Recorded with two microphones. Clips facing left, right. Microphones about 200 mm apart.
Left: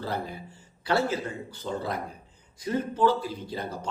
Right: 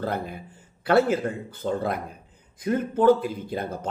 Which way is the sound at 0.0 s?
55° right (ahead or behind).